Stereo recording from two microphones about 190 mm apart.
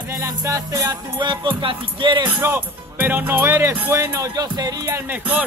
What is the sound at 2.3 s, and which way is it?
Speech, 10° right (ahead or behind).